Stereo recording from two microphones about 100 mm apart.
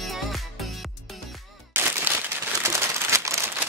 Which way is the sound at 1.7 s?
20° right (ahead or behind).